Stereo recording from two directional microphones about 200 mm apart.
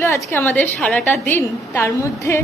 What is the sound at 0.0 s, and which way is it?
A woman's voice, 15° left (ahead or behind).